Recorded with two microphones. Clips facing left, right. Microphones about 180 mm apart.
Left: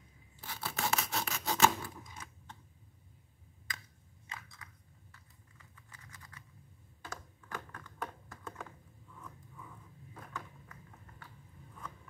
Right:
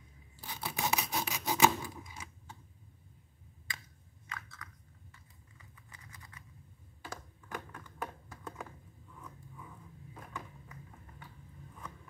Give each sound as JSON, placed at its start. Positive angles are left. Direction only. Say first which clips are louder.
{"t": 0.4, "sound": "rub", "louder": "right 1 dB", "side_deg": -15}
{"t": 4.3, "sound": "chewing", "louder": "right 2 dB", "side_deg": 25}
{"t": 5.9, "sound": "computer keyboard", "louder": "even", "side_deg": -15}
{"t": 10.1, "sound": "a sound", "louder": "even", "side_deg": -15}